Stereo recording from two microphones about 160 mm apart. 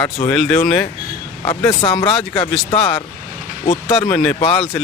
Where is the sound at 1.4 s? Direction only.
20° left (ahead or behind).